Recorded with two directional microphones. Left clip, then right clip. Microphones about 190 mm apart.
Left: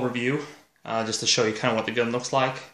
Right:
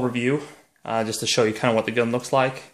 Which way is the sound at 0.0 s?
40° right (ahead or behind).